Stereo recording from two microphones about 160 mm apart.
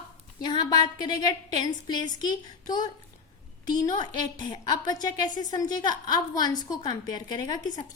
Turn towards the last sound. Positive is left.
turn(degrees=25)  # may be behind; listen again after turning